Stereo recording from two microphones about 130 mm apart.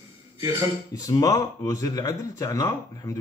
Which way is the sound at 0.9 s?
30° left (ahead or behind).